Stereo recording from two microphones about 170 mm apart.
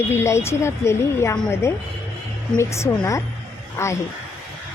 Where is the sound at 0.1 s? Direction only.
15° left (ahead or behind).